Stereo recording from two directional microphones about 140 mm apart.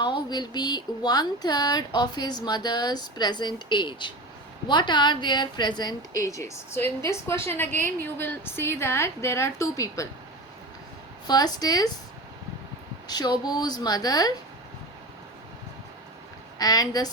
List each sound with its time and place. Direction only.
0.0 s speech: 30° left (ahead or behind)
11.3 s speech: 30° left (ahead or behind)
13.1 s speech: 30° left (ahead or behind)
16.6 s speech: 25° left (ahead or behind)